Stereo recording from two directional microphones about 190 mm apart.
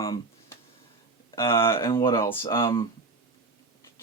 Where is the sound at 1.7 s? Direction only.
15° left (ahead or behind).